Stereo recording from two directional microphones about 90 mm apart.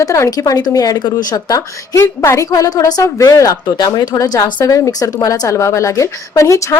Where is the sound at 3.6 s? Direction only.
50° left (ahead or behind).